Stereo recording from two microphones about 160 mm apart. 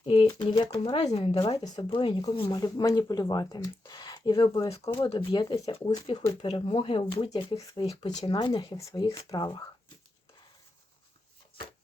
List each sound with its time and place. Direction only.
0.0 s pigeon: 35° left (ahead or behind)
0.5 s speech: 30° left (ahead or behind)
2.5 s speech: 25° left (ahead or behind)
7.3 s speech: 20° left (ahead or behind)